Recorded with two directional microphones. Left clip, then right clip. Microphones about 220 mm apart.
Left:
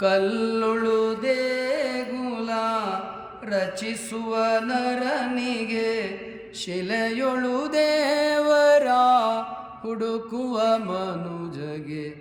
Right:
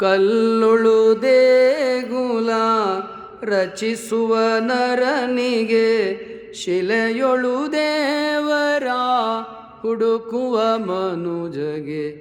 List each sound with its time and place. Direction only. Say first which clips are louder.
0.0 s mantra: right 6 dB; 10° right (ahead or behind)
3.4 s music: right 6 dB; 15° right (ahead or behind)